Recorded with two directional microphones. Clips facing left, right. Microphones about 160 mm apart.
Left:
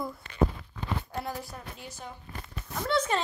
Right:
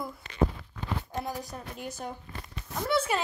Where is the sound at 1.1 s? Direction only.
20° right (ahead or behind).